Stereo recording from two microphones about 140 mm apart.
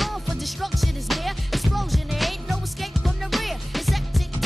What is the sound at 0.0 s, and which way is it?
Music, centre (ahead or behind).